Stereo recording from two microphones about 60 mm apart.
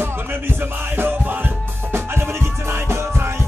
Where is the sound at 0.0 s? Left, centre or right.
Right.